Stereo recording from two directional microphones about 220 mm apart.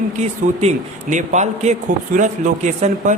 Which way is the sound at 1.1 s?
30° right (ahead or behind).